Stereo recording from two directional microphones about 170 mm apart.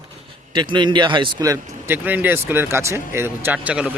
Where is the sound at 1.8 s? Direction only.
10° right (ahead or behind).